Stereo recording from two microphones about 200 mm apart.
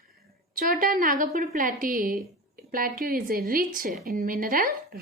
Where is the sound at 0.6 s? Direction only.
45° right (ahead or behind).